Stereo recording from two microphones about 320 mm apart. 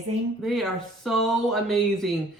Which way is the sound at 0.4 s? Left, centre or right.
Centre.